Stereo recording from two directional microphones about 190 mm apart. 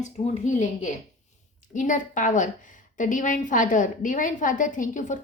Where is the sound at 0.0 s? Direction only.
40° left (ahead or behind).